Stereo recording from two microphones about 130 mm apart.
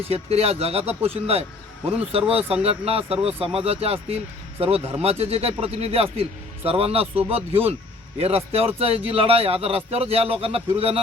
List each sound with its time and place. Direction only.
0.1 s a man's voice: 50° right (ahead or behind)